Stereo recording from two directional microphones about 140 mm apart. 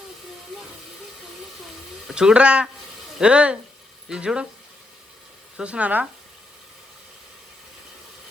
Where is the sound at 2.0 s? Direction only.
5° right (ahead or behind).